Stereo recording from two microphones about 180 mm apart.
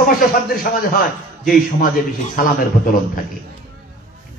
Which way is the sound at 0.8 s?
50° left (ahead or behind).